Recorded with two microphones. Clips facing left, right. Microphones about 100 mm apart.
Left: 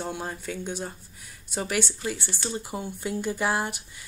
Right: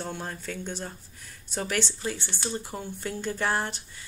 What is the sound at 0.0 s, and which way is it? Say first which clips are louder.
Speech: left 2 dB; 10° left (ahead or behind).